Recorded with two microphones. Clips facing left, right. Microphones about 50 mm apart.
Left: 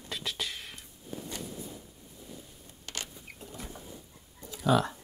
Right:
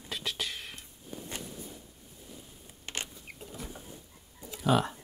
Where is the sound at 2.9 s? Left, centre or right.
Right.